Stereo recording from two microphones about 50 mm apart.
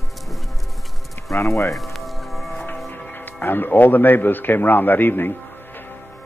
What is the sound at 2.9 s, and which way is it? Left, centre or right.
A man's voice, left.